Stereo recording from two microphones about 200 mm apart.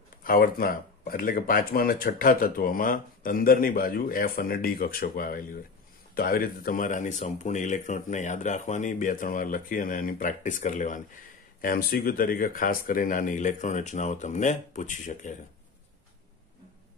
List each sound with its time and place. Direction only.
0.2 s speech: 45° left (ahead or behind)